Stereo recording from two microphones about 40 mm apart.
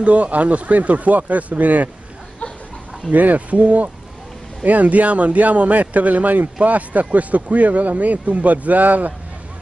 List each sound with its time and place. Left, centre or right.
0.0 s speech: right
3.1 s speech: right